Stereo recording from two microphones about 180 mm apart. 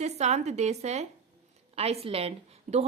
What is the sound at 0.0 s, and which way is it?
A woman's voice, 40° right (ahead or behind).